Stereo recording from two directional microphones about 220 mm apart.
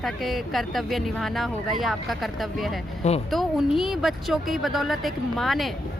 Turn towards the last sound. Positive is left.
turn(degrees=0)  # may be behind; listen again after turning